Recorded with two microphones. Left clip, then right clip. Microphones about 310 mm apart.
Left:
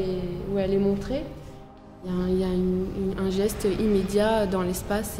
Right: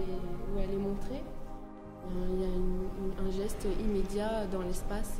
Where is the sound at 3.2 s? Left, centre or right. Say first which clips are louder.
Left 12 dB; left.